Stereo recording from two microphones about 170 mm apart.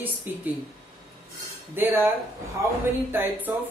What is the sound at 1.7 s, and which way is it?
Speech, 10° right (ahead or behind).